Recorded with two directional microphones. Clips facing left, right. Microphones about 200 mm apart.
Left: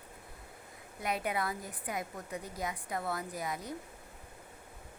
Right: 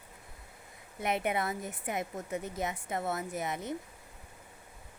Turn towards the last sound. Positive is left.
turn(degrees=-25)  # may be behind; listen again after turning